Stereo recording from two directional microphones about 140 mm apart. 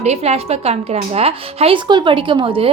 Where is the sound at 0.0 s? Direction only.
50° right (ahead or behind).